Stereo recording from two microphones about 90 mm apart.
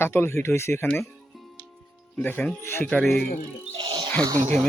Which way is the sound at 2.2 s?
20° left (ahead or behind).